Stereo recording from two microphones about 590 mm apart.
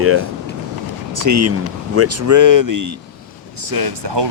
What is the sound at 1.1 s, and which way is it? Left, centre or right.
Speech, right.